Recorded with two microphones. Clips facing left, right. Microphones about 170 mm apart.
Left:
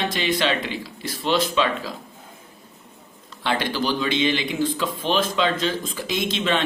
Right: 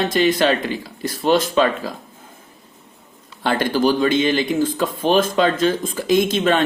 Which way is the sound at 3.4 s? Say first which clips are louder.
Right 6 dB; 45° right (ahead or behind).